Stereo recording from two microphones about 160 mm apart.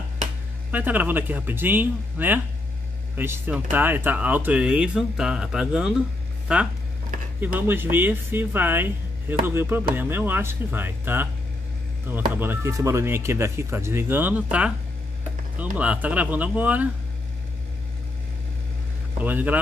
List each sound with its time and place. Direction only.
0.7 s speech: 10° right (ahead or behind)
15.8 s speech: 10° right (ahead or behind)
19.2 s speech: 10° right (ahead or behind)